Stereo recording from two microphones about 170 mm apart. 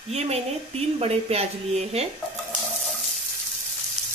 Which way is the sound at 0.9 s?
35° right (ahead or behind).